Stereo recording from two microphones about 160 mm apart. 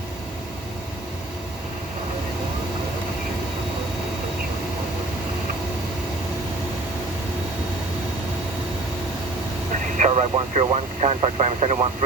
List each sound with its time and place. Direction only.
10.0 s speech: 40° right (ahead or behind)